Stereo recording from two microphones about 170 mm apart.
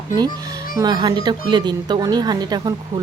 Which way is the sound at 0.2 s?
20° right (ahead or behind).